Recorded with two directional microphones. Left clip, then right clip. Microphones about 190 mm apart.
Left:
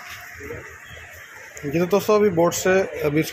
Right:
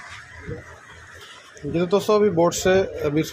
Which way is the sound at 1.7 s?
Centre (ahead or behind).